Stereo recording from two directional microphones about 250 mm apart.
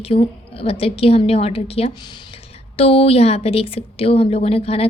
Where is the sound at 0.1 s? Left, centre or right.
Left.